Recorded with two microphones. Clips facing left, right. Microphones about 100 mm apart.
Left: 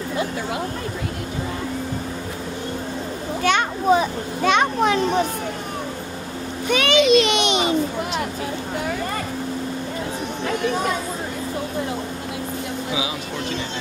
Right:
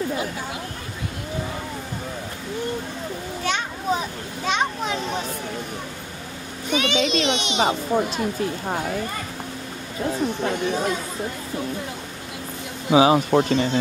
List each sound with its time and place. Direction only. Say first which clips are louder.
3.4 s children playing: left 7 dB; 70° left (ahead or behind)
6.7 s a child's voice: left 6 dB; 65° left (ahead or behind)
12.9 s speech: right 16 dB; 50° right (ahead or behind)